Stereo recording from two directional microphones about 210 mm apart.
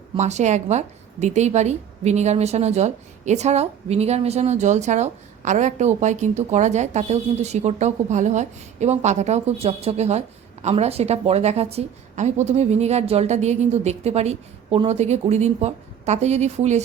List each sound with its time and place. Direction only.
0.2 s a woman's voice: 35° right (ahead or behind)